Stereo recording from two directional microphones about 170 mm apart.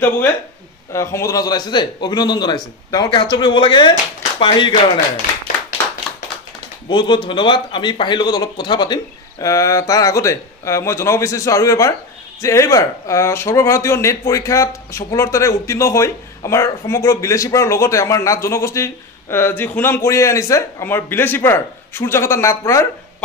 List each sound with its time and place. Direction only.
0.9 s a man's voice: 15° left (ahead or behind)
6.9 s a man's voice: 25° left (ahead or behind)